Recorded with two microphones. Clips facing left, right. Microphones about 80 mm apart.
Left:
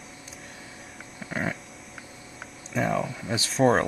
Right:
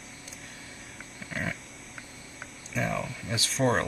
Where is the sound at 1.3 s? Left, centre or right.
Left.